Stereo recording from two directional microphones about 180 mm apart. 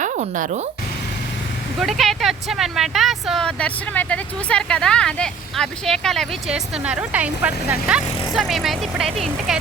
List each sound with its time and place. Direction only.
0.0 s speech: 45° right (ahead or behind)
1.8 s speech: centre (ahead or behind)